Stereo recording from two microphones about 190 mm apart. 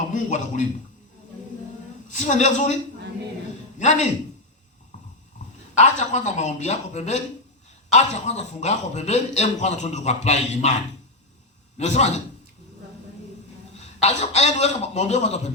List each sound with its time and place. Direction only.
0.1 s a man's voice: 40° left (ahead or behind)
2.0 s a man's voice: 40° left (ahead or behind)
3.8 s a man's voice: 40° left (ahead or behind)
5.7 s a man's voice: 40° left (ahead or behind)
11.8 s a man's voice: 35° left (ahead or behind)
13.7 s a man's voice: 35° left (ahead or behind)